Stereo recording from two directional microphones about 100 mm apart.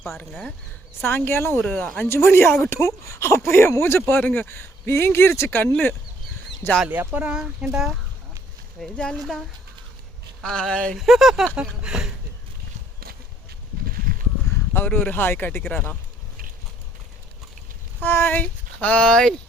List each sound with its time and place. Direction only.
1.0 s speech: 25° left (ahead or behind)
6.8 s speech: 15° right (ahead or behind)
8.8 s speech: 5° left (ahead or behind)
14.7 s speech: 20° left (ahead or behind)
18.0 s speech: 20° left (ahead or behind)